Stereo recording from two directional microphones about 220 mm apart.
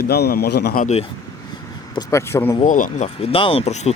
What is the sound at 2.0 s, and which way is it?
Speech, 15° left (ahead or behind).